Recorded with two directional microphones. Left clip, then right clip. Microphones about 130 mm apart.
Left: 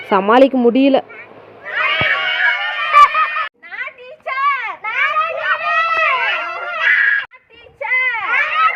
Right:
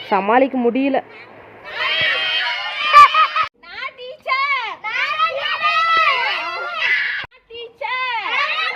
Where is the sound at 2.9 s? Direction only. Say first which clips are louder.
Right 1 dB; 5° right (ahead or behind).